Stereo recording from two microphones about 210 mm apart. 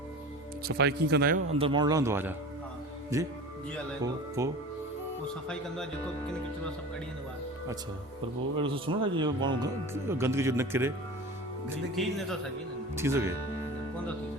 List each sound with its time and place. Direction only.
0.7 s speech: 50° right (ahead or behind)
1.5 s speech: 25° right (ahead or behind)
5.5 s speech: 5° left (ahead or behind)
8.5 s speech: 25° right (ahead or behind)
12.0 s speech: centre (ahead or behind)
13.0 s speech: 10° right (ahead or behind)